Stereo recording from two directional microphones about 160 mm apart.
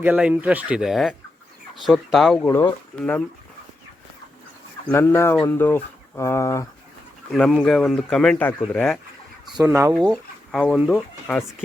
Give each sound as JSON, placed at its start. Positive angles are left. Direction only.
{"t": 0.0, "sound": "speech", "side_deg": -10}
{"t": 4.9, "sound": "speech", "side_deg": 15}
{"t": 7.3, "sound": "speech", "side_deg": 0}
{"t": 9.6, "sound": "speech", "side_deg": -20}
{"t": 10.0, "sound": "speech", "side_deg": 5}
{"t": 10.8, "sound": "speech", "side_deg": -10}